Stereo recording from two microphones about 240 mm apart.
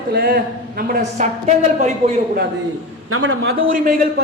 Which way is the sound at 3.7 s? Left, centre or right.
Right.